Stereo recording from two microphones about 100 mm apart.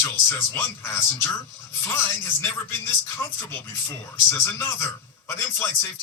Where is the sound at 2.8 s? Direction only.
30° left (ahead or behind).